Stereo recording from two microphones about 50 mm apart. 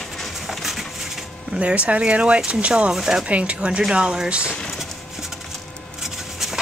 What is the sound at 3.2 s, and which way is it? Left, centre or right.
Speech, right.